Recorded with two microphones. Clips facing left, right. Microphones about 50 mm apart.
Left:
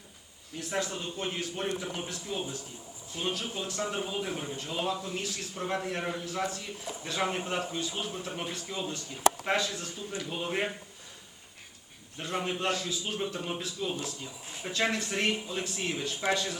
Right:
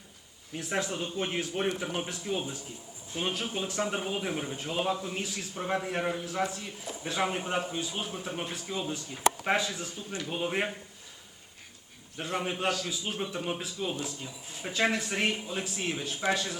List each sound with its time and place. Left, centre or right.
0.5 s a man's voice: centre
4.0 s speech: right
4.3 s a man's voice: centre
12.1 s a man's voice: centre